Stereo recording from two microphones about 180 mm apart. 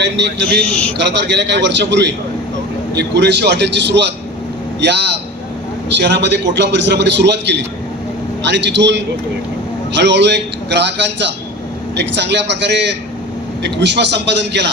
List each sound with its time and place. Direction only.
0.0 s a man's voice: 75° right (ahead or behind)